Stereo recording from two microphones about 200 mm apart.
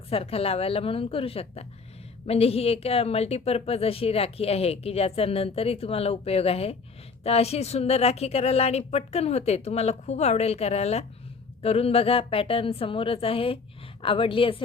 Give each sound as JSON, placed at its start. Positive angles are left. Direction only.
{"t": 0.1, "sound": "a woman's voice", "side_deg": 30}